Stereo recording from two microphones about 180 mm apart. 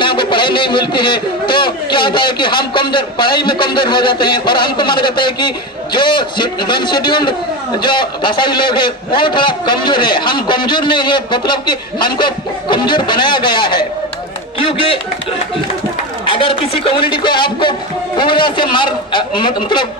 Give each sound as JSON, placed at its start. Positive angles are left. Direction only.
{"t": 0.0, "sound": "a man's voice", "side_deg": 25}
{"t": 16.3, "sound": "a man's voice", "side_deg": 30}